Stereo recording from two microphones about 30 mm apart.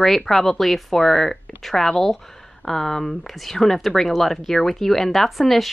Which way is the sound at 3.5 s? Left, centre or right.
Centre.